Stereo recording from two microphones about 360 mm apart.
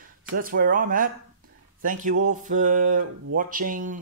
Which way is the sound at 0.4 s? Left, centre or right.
Right.